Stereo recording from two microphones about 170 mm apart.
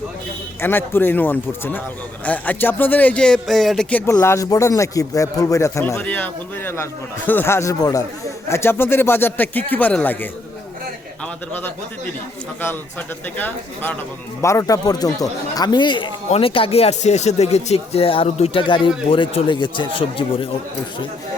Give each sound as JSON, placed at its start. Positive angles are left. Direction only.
{"t": 0.6, "sound": "speech", "side_deg": 15}
{"t": 11.5, "sound": "speech", "side_deg": 10}
{"t": 14.4, "sound": "speech", "side_deg": 20}